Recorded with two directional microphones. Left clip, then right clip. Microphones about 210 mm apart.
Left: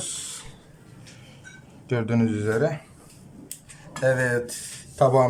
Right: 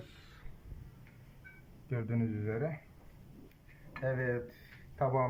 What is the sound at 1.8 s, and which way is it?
Speech, 50° left (ahead or behind).